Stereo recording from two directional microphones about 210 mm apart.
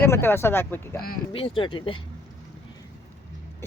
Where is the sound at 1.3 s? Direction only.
25° left (ahead or behind).